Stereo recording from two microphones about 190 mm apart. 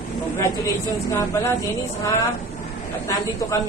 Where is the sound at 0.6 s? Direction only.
15° left (ahead or behind).